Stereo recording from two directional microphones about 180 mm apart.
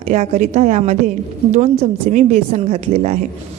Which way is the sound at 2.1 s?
45° right (ahead or behind).